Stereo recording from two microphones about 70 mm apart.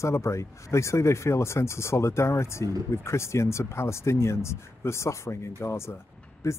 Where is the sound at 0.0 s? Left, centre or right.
Left.